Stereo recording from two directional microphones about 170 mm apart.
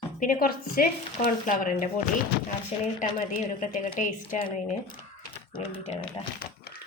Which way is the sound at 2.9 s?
45° left (ahead or behind).